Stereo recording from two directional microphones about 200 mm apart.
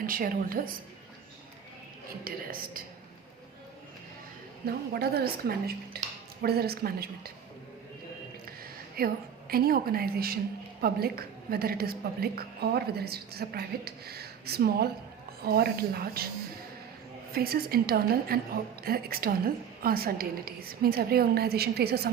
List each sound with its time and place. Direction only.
0.0 s a woman's voice: 45° right (ahead or behind)
2.2 s a woman's voice: 45° right (ahead or behind)
4.6 s a woman's voice: 50° right (ahead or behind)
8.4 s a sound: 50° right (ahead or behind)
9.5 s a woman's voice: 50° right (ahead or behind)
17.3 s a woman's voice: 50° right (ahead or behind)